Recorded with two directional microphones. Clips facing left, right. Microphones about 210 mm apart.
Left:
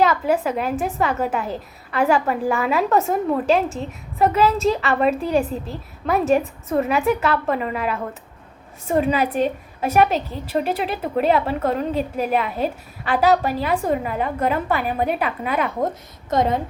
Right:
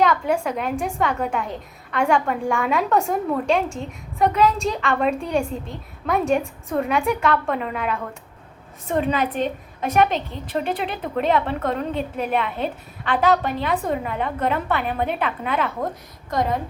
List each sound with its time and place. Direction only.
0.0 s a woman's voice: 5° left (ahead or behind)
16.3 s a woman's voice: 25° left (ahead or behind)